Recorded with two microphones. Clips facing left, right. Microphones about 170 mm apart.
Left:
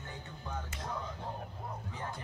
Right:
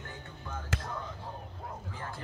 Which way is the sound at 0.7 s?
90° right.